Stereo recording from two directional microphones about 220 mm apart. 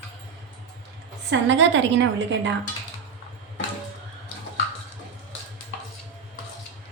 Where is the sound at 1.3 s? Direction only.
55° right (ahead or behind).